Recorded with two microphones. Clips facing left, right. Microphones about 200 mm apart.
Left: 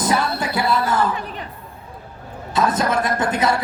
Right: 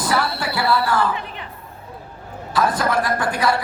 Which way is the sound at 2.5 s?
20° left (ahead or behind).